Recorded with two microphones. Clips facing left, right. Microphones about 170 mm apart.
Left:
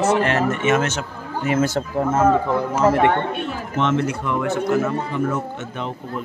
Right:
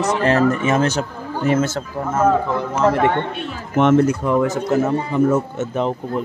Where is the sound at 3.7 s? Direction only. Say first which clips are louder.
Right 7 dB; 50° right (ahead or behind).